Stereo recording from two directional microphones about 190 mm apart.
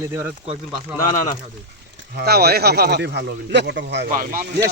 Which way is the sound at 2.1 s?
55° right (ahead or behind).